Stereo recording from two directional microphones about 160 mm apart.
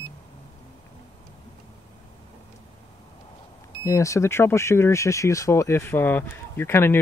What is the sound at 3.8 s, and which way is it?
Speech, 20° left (ahead or behind).